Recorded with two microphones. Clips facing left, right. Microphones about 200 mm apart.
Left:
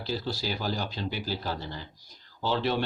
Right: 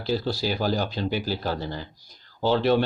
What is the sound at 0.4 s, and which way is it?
Speech, 55° right (ahead or behind).